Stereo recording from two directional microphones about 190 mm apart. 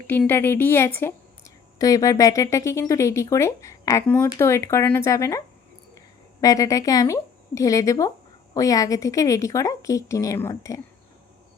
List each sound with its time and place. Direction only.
0.1 s speech: 10° left (ahead or behind)
6.4 s speech: 20° left (ahead or behind)